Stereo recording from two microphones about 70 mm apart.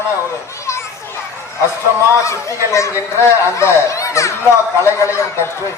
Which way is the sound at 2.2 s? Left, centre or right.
Left.